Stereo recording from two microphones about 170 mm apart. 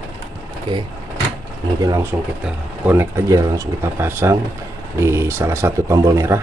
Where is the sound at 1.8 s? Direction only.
20° right (ahead or behind).